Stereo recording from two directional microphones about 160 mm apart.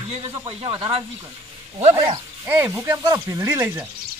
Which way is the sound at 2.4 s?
15° right (ahead or behind).